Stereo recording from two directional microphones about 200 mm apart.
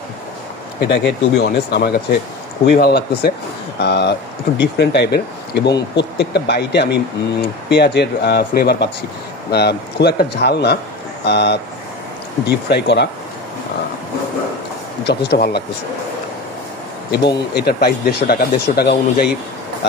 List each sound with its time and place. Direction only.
0.7 s speech: 55° left (ahead or behind)
15.0 s speech: 50° left (ahead or behind)
17.6 s speech: 50° left (ahead or behind)